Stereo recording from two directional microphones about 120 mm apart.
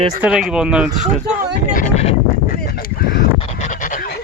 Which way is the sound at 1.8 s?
60° left (ahead or behind).